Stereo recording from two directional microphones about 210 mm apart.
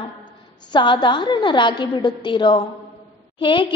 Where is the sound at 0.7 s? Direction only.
20° left (ahead or behind).